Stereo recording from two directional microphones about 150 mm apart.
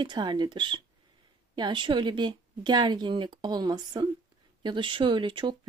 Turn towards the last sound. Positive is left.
turn(degrees=-35)  # may be behind; listen again after turning